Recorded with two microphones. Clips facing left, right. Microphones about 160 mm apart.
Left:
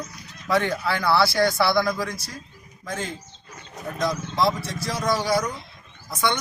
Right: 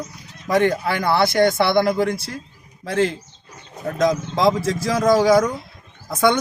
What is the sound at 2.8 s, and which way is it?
Speech, 75° right (ahead or behind).